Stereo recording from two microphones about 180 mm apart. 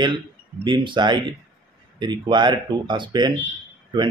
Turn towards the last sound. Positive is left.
turn(degrees=-25)  # may be behind; listen again after turning